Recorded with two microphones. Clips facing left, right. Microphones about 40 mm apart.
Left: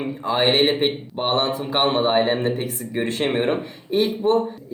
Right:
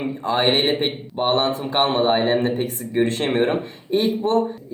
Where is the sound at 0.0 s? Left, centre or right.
Centre.